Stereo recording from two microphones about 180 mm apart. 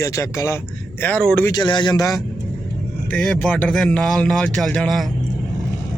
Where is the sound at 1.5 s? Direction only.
25° left (ahead or behind).